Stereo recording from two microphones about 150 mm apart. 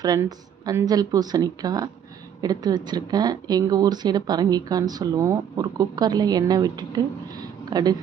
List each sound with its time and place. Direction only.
0.0 s speech: 25° right (ahead or behind)